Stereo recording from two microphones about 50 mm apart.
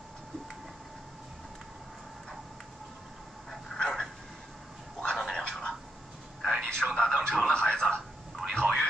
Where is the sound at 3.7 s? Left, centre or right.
Centre.